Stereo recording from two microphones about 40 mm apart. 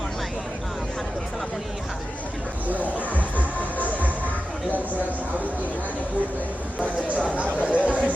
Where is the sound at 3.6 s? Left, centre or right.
Right.